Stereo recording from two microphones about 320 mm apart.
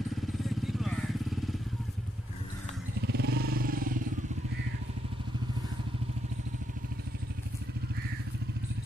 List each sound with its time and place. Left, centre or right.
0.4 s vehicle: centre
3.1 s motorcycle: right